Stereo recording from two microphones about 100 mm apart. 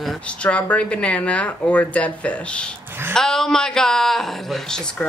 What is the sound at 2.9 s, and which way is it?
Speech, 20° right (ahead or behind).